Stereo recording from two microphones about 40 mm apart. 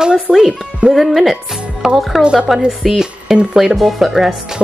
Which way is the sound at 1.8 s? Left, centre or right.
Centre.